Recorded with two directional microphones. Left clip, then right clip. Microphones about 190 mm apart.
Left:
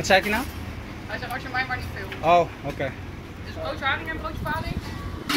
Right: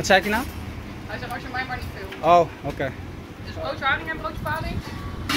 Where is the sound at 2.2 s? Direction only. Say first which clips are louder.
Right 2 dB; 15° right (ahead or behind).